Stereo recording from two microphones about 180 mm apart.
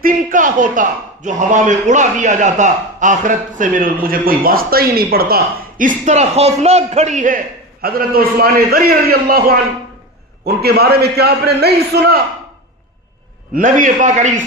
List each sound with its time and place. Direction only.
0.0 s a man's voice: 50° right (ahead or behind)
10.4 s a man's voice: 60° right (ahead or behind)
13.5 s a man's voice: 45° right (ahead or behind)